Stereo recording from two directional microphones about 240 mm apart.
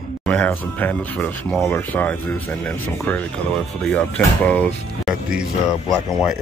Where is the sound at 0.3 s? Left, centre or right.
Centre.